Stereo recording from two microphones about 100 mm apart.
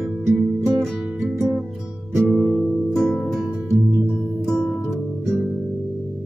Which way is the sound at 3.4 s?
15° right (ahead or behind).